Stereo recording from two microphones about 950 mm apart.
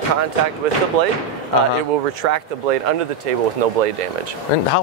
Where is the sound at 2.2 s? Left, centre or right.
Right.